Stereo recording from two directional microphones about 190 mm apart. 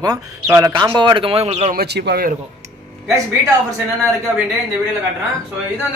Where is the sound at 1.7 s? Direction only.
50° right (ahead or behind).